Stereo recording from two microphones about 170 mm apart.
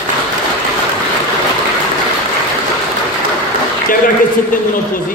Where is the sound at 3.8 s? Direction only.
55° left (ahead or behind).